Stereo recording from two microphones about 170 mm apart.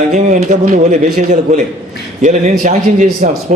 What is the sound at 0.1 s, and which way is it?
A man's voice, 45° right (ahead or behind).